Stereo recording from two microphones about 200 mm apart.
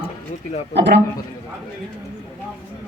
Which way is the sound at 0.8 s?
60° right (ahead or behind).